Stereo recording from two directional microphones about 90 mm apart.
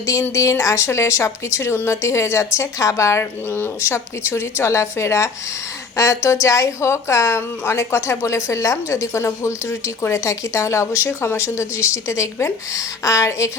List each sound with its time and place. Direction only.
0.0 s a woman's voice: 35° left (ahead or behind)